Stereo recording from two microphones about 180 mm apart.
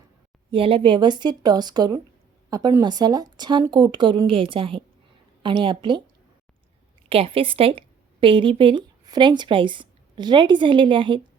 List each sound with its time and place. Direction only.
0.5 s speech: 30° right (ahead or behind)
7.1 s a woman's voice: 30° right (ahead or behind)